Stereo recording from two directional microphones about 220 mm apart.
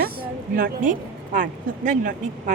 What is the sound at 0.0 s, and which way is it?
A woman's voice, 40° right (ahead or behind).